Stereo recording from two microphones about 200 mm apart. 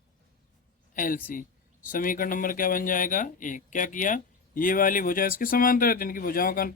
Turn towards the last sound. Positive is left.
turn(degrees=45)  # may be behind; listen again after turning